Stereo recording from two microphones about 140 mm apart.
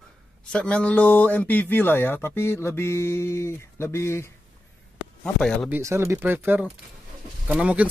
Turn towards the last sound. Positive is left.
turn(degrees=-10)  # may be behind; listen again after turning